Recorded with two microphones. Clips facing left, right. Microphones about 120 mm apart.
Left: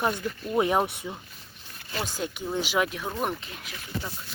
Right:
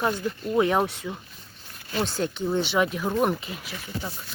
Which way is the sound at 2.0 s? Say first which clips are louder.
Right 6 dB; 10° left (ahead or behind).